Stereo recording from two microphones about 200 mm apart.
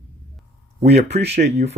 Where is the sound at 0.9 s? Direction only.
55° right (ahead or behind).